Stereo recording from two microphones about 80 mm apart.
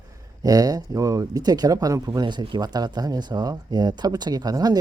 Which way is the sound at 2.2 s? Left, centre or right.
Right.